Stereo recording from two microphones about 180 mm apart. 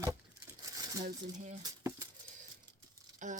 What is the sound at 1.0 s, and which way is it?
Speech, 45° right (ahead or behind).